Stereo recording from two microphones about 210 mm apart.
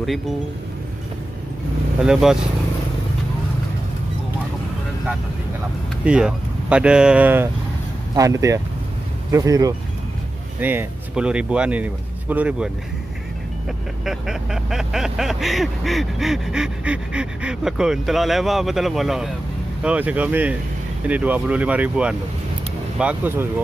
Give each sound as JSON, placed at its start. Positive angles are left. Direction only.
{"t": 2.0, "sound": "vehicle", "side_deg": 0}
{"t": 6.0, "sound": "speech", "side_deg": -5}
{"t": 10.6, "sound": "vehicle", "side_deg": -10}
{"t": 14.0, "sound": "vehicle", "side_deg": 0}
{"t": 19.8, "sound": "speech", "side_deg": -5}